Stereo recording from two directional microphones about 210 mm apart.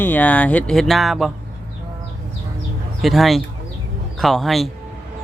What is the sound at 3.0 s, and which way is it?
Speech, centre (ahead or behind).